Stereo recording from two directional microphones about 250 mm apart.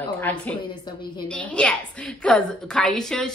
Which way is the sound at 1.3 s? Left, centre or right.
Centre.